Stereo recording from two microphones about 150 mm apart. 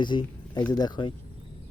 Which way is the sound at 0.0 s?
30° left (ahead or behind).